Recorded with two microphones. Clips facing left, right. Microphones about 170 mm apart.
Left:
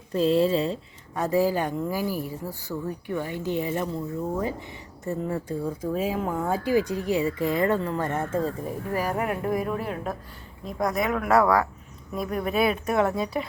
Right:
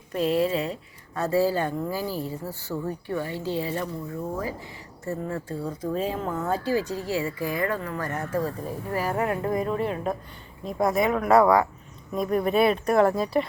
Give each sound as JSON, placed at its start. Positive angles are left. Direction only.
{"t": 0.1, "sound": "speech", "side_deg": 30}
{"t": 1.1, "sound": "speech", "side_deg": 15}
{"t": 5.0, "sound": "speech", "side_deg": 15}
{"t": 9.6, "sound": "speech", "side_deg": 5}